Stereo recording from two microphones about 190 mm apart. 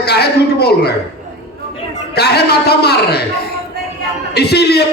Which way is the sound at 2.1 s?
60° left (ahead or behind).